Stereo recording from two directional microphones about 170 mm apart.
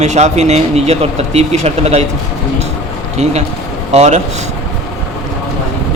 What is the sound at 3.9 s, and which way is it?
Speech, 40° right (ahead or behind).